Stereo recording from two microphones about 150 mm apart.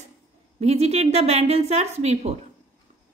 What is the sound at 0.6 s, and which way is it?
A woman's voice, 45° right (ahead or behind).